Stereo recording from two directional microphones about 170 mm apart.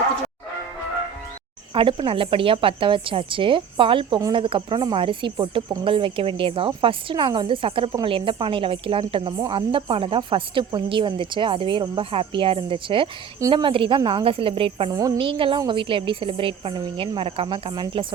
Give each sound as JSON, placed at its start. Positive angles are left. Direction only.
{"t": 1.7, "sound": "speech", "side_deg": -30}
{"t": 14.9, "sound": "speech", "side_deg": -20}